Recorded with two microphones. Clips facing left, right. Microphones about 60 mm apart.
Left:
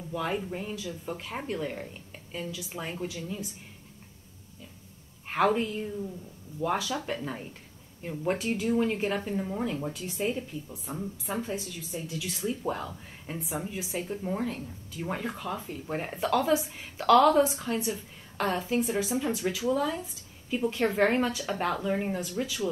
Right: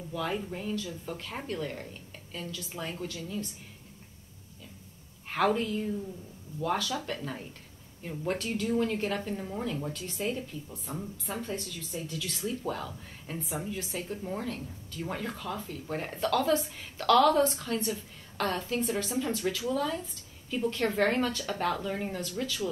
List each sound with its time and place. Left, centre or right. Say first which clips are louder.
0.1 s speech: left 2 dB; centre
5.6 s speech: even; centre